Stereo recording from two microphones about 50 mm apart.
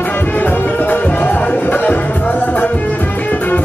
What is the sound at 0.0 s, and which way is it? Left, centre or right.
Music, left.